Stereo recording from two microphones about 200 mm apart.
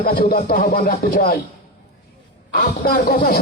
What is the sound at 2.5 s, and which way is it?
Speech, 50° left (ahead or behind).